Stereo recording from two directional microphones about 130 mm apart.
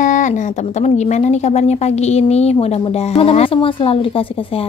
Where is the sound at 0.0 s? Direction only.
70° left (ahead or behind).